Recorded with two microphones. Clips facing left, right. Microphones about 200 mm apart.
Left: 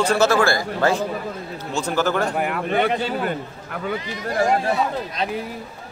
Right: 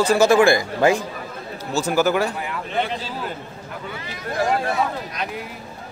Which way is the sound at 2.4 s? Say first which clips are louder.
Left 5 dB; 60° left (ahead or behind).